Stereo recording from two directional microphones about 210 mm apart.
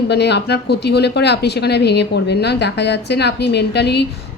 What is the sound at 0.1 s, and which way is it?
Speech, 55° left (ahead or behind).